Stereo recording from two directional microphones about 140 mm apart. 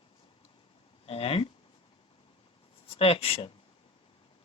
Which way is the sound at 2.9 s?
45° left (ahead or behind).